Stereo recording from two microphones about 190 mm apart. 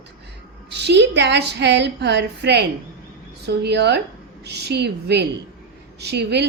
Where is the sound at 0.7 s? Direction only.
60° right (ahead or behind).